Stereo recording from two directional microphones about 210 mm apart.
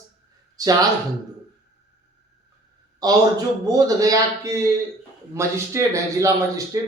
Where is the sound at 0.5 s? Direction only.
15° right (ahead or behind).